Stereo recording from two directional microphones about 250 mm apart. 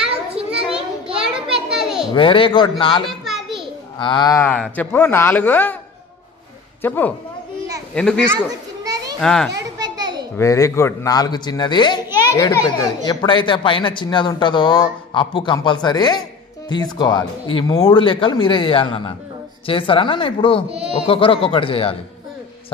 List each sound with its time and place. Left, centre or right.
0.5 s children playing: centre
1.1 s a sound: centre
2.1 s a child's voice: left
3.1 s a sound: centre
4.0 s speech: centre
6.8 s speech: centre
8.5 s children playing: centre
9.2 s speech: centre
9.8 s a sound: centre
10.3 s a child's voice: centre